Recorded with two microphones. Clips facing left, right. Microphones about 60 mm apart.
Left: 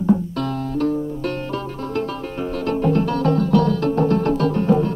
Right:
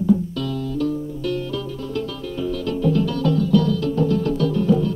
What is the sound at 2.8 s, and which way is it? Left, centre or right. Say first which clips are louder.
Music: left 1 dB; left.